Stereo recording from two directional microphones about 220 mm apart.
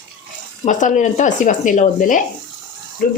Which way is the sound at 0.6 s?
35° left (ahead or behind).